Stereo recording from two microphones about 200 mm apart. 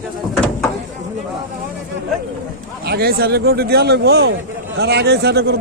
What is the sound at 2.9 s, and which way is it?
Speech, 50° right (ahead or behind).